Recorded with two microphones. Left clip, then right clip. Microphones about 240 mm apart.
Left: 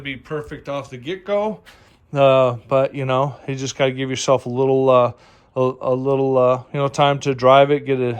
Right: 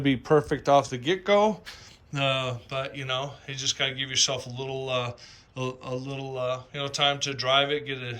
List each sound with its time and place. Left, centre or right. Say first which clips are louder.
0.0 s speech: right 5 dB; centre
2.1 s speech: left 13 dB; centre